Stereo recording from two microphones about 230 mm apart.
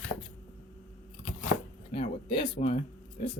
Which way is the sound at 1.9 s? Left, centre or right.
Left.